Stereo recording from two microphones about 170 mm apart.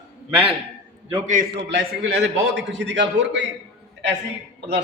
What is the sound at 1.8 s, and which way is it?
A man's voice, 90° right.